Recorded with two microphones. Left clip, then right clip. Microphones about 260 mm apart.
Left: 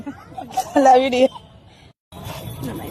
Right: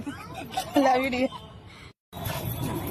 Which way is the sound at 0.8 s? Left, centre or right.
Left.